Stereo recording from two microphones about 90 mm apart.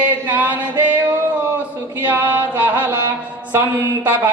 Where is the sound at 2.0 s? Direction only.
20° right (ahead or behind).